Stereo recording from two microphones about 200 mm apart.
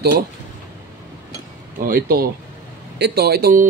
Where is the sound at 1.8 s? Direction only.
45° right (ahead or behind).